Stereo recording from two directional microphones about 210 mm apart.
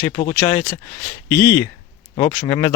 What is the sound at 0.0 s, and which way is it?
Speech, 15° left (ahead or behind).